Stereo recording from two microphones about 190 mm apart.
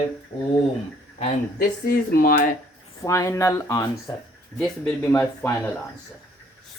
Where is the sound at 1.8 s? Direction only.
50° left (ahead or behind).